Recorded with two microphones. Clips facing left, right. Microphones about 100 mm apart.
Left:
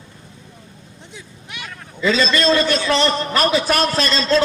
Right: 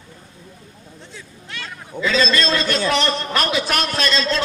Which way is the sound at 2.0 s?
45° right (ahead or behind).